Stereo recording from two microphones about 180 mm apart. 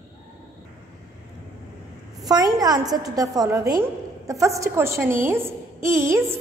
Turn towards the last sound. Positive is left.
turn(degrees=-15)  # may be behind; listen again after turning